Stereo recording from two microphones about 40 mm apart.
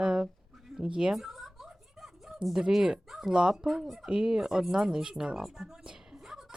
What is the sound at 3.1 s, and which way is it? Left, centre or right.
Speech, centre.